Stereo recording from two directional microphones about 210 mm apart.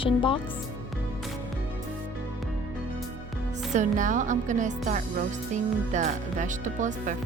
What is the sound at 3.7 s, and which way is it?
Speech, 35° right (ahead or behind).